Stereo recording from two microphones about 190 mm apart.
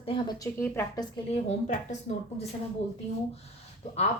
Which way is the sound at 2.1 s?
35° left (ahead or behind).